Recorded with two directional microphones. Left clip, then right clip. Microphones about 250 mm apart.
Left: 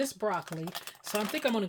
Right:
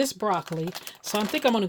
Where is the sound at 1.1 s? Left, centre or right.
Right.